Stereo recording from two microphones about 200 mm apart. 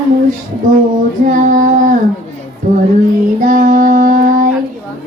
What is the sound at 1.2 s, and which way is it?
Child singing, 40° right (ahead or behind).